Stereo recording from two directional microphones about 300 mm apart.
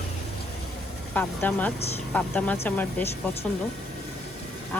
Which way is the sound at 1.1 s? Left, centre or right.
Centre.